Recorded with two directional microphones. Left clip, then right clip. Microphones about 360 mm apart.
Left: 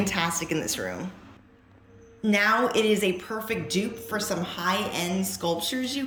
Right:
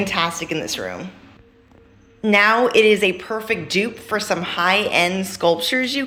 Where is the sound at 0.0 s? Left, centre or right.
Centre.